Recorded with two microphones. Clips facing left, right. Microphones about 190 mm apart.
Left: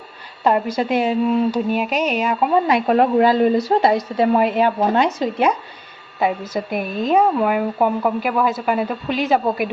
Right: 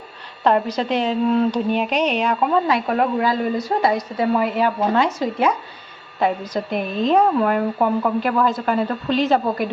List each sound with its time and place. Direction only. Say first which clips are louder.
0.4 s a woman's voice: even; 5° left (ahead or behind)
2.8 s a woman's voice: left 5 dB; 30° left (ahead or behind)
6.1 s speech: even; 5° left (ahead or behind)